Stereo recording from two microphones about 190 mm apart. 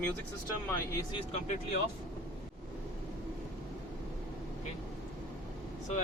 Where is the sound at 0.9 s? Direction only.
25° left (ahead or behind).